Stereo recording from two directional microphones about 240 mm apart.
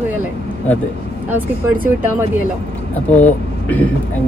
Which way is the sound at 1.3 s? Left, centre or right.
Centre.